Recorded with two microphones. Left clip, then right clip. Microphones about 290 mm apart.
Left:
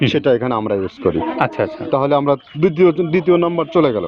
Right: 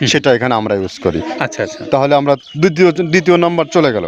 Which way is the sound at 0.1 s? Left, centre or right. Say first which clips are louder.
Right 4 dB; right.